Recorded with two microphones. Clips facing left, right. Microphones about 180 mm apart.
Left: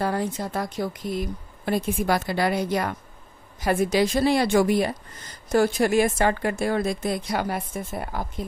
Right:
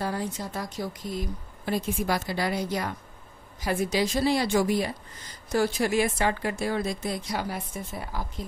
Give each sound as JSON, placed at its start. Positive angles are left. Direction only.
{"t": 0.0, "sound": "a woman's voice", "side_deg": 60}